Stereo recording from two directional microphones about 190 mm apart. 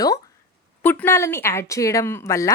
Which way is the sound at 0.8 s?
10° left (ahead or behind).